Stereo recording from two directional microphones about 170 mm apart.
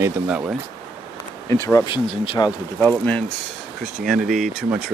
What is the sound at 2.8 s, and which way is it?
Speech, 10° left (ahead or behind).